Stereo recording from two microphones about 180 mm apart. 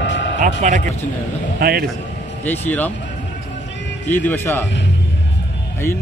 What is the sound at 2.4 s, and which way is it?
Speech, 10° left (ahead or behind).